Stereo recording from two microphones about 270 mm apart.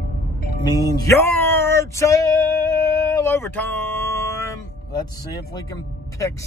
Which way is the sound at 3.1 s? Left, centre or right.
Centre.